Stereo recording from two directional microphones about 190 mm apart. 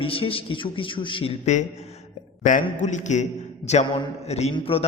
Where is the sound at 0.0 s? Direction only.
30° left (ahead or behind).